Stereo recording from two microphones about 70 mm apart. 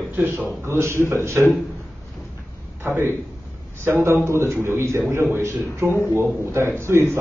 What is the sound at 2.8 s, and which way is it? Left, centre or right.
A man's voice, right.